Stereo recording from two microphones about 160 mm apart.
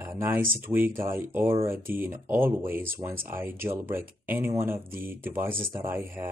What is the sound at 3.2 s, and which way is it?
Speech, 15° right (ahead or behind).